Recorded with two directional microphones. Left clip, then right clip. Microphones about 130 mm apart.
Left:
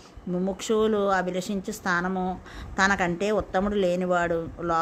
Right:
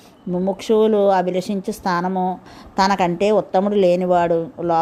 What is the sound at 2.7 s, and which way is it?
A woman's voice, 30° right (ahead or behind).